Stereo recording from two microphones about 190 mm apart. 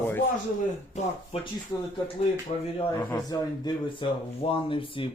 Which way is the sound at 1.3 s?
30° left (ahead or behind).